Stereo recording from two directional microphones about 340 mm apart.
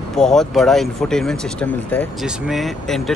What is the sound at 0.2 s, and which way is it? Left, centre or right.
Speech, centre.